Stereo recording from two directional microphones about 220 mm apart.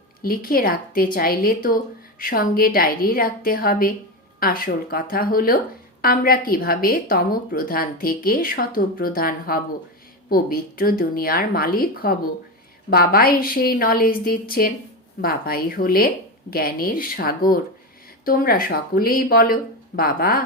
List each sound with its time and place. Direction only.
0.2 s a woman's voice: 40° left (ahead or behind)